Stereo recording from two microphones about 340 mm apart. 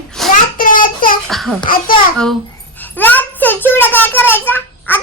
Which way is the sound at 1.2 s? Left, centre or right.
Centre.